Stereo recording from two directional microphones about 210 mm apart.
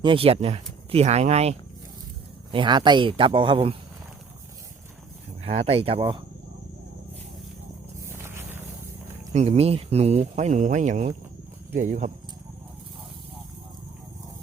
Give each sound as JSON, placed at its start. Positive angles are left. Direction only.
{"t": 0.0, "sound": "speech", "side_deg": -25}
{"t": 5.4, "sound": "speech", "side_deg": -30}
{"t": 9.3, "sound": "speech", "side_deg": -30}